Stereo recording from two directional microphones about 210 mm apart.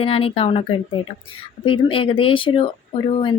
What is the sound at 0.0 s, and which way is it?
Speech, 25° left (ahead or behind).